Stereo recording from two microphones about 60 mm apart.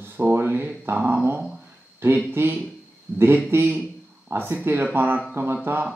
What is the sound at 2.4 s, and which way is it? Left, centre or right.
Speech, right.